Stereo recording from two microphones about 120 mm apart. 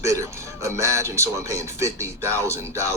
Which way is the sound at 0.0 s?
25° right (ahead or behind).